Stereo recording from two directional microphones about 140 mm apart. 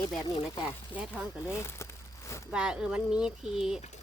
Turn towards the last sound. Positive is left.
turn(degrees=-5)  # may be behind; listen again after turning